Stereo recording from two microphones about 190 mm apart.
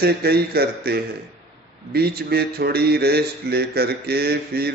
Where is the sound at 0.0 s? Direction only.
55° right (ahead or behind).